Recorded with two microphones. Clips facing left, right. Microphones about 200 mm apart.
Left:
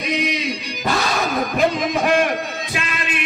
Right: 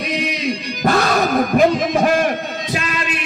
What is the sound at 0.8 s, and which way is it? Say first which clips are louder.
Music: right 5 dB; 55° right (ahead or behind).